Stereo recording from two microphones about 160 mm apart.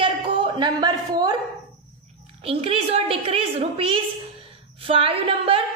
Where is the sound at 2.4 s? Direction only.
35° right (ahead or behind).